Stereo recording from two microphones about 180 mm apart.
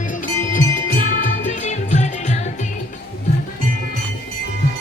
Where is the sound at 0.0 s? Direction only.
45° left (ahead or behind).